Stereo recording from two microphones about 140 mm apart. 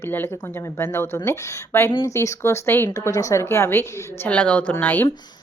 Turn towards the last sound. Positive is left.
turn(degrees=15)  # may be behind; listen again after turning